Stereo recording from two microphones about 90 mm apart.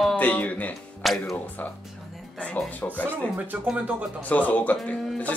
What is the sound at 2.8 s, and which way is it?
Speech, 25° left (ahead or behind).